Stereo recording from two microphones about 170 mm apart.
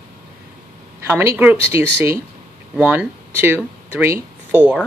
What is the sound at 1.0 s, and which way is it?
Speech, 15° right (ahead or behind).